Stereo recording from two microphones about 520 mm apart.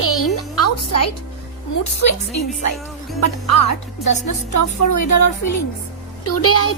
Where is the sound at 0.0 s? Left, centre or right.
Left.